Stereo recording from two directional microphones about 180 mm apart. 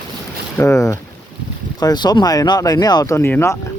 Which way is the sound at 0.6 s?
15° left (ahead or behind).